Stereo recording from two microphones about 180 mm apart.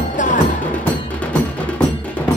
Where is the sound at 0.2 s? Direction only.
45° left (ahead or behind).